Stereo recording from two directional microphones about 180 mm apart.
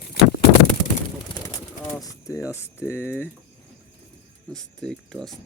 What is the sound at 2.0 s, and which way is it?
Speech, 20° left (ahead or behind).